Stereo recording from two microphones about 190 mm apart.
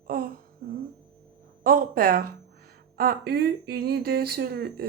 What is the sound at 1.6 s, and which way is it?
Speech, 50° right (ahead or behind).